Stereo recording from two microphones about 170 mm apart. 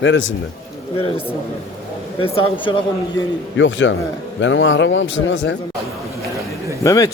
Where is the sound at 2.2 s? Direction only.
30° left (ahead or behind).